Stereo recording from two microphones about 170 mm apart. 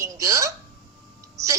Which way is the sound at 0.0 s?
20° right (ahead or behind).